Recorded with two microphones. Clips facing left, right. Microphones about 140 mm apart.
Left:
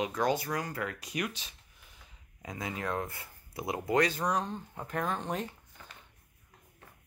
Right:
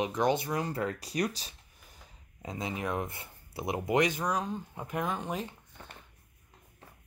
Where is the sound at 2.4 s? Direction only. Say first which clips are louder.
Right 2 dB; 25° right (ahead or behind).